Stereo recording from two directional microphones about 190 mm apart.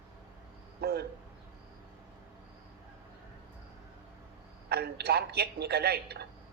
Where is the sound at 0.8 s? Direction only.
55° right (ahead or behind).